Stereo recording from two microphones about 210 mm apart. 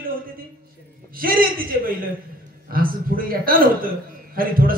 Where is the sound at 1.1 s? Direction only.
45° right (ahead or behind).